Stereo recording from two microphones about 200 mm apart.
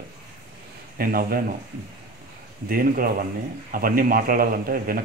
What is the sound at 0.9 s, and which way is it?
Speech, 45° right (ahead or behind).